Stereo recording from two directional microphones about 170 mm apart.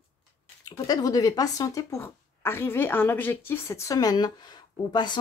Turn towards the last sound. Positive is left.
turn(degrees=25)  # may be behind; listen again after turning